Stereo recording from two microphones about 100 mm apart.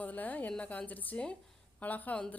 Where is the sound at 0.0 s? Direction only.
15° left (ahead or behind).